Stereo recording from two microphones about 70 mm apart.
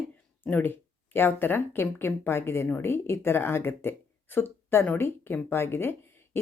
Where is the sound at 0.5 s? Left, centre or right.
Left.